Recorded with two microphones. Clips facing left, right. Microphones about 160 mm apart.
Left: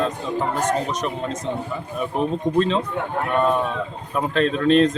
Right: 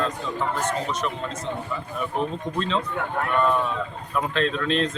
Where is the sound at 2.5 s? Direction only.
45° left (ahead or behind).